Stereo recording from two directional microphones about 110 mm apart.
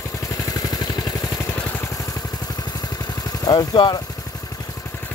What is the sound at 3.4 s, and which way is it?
Speech, 40° left (ahead or behind).